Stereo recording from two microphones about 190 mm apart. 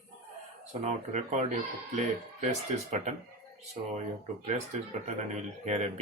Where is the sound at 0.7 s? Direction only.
40° right (ahead or behind).